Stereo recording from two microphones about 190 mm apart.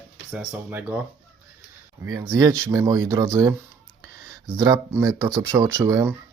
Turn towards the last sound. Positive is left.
turn(degrees=-15)  # may be behind; listen again after turning